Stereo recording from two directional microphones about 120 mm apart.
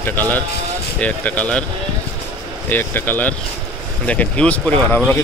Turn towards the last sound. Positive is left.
turn(degrees=10)  # may be behind; listen again after turning